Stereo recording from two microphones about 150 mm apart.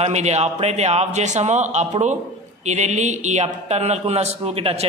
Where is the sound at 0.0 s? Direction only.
45° right (ahead or behind).